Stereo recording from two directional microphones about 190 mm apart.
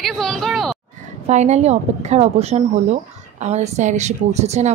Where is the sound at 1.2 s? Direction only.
35° right (ahead or behind).